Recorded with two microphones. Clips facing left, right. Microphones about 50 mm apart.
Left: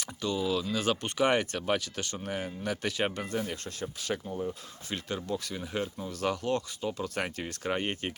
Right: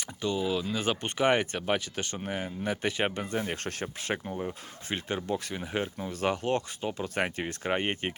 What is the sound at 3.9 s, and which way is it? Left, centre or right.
Speech, right.